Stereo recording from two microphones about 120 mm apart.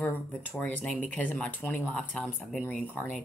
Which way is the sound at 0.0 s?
15° left (ahead or behind).